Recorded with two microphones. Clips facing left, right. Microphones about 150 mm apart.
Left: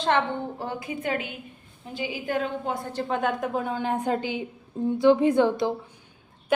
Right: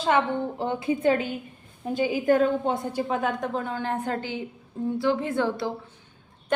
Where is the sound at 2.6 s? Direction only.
20° right (ahead or behind).